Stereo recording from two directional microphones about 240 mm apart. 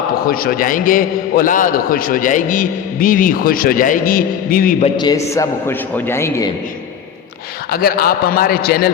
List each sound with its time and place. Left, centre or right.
0.3 s a man's voice: left
4.9 s a man's voice: centre
7.7 s a man's voice: left